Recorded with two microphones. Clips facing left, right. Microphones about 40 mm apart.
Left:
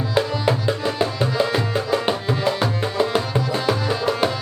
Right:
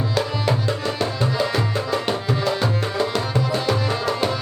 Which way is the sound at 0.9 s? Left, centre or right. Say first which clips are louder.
Left 2 dB; centre.